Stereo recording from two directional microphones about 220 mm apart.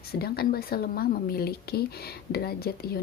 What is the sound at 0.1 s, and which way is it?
Speech, 45° left (ahead or behind).